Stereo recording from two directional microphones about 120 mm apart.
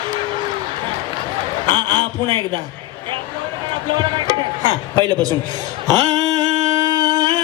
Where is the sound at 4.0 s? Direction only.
40° right (ahead or behind).